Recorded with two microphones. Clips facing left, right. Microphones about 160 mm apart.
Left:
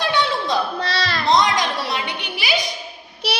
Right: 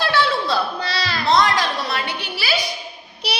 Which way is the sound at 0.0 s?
20° left (ahead or behind).